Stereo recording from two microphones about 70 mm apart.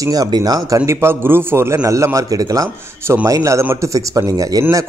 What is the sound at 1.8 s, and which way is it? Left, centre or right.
A man's voice, right.